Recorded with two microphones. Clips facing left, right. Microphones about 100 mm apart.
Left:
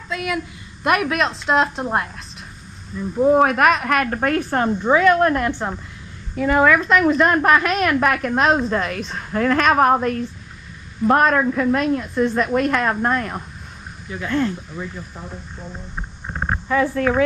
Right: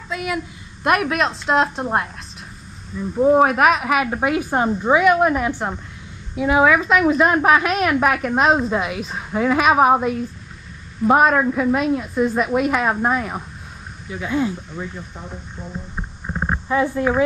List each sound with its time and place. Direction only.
0.1 s a woman's voice: centre (ahead or behind)
16.6 s speech: 15° right (ahead or behind)